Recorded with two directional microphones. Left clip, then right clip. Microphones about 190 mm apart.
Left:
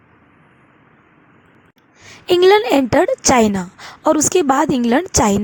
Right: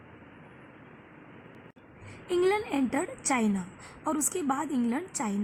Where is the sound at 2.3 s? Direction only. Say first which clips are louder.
Left 16 dB; 50° left (ahead or behind).